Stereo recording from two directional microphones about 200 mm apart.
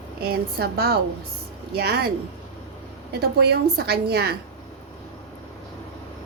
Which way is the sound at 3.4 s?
55° right (ahead or behind).